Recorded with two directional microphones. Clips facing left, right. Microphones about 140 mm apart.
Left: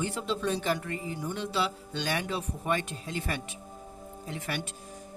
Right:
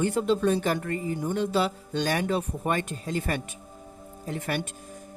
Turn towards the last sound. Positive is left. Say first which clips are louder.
# right 5 dB
turn(degrees=-50)  # may be behind; listen again after turning